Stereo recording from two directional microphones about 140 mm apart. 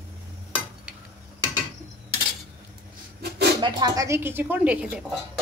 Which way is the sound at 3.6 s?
25° right (ahead or behind).